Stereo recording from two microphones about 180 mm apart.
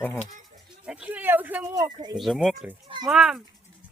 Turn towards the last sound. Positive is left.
turn(degrees=-5)  # may be behind; listen again after turning